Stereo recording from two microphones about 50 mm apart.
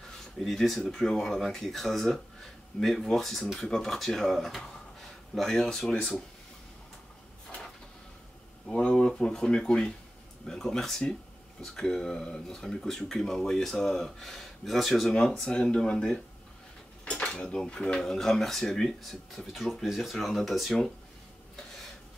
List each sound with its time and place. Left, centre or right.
0.4 s speech: centre
8.9 s speech: centre
17.2 s cutlery: centre
17.6 s speech: centre